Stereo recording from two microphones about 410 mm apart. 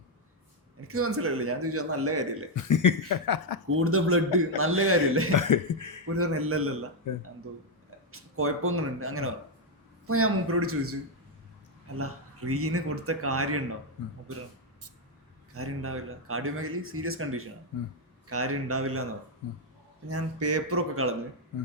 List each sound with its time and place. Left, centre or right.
0.9 s speech: right
2.6 s speech: left
3.7 s speech: right
5.3 s speech: left
6.1 s speech: right
7.1 s speech: left
8.1 s speech: right
11.9 s speech: right
15.5 s speech: right
20.1 s speech: right